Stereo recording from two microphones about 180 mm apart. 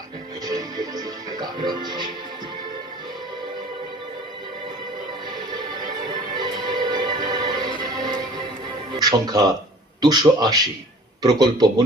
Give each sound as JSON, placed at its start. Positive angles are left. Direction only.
{"t": 0.4, "sound": "music", "side_deg": -20}
{"t": 6.3, "sound": "music", "side_deg": -25}
{"t": 10.0, "sound": "a man's voice", "side_deg": -20}